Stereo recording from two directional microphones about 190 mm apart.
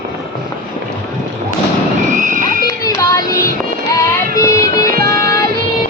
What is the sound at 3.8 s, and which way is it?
Child singing, 15° left (ahead or behind).